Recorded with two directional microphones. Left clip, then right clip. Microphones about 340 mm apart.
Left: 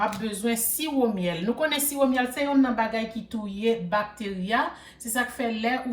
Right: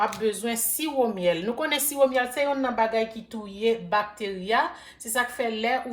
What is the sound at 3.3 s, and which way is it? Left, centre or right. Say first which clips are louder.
Speech: left 3 dB; centre.